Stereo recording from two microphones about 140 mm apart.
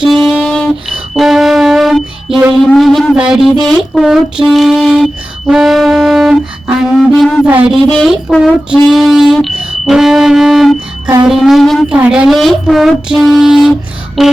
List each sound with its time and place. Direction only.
0.3 s music: centre (ahead or behind)
2.6 s speech: centre (ahead or behind)
5.5 s music: centre (ahead or behind)
7.2 s a sound: 5° left (ahead or behind)
7.4 s speech: 10° right (ahead or behind)
7.9 s speech: centre (ahead or behind)
11.9 s speech: 10° right (ahead or behind)